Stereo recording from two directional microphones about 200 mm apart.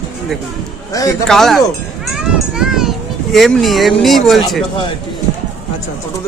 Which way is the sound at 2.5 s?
Centre (ahead or behind).